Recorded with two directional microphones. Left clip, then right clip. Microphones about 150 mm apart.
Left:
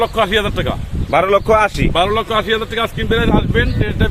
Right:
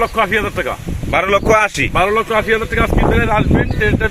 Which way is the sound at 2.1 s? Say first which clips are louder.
Right 2 dB; 35° left (ahead or behind).